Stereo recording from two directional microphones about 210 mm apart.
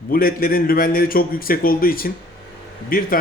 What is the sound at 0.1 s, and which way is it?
Speech, 45° left (ahead or behind).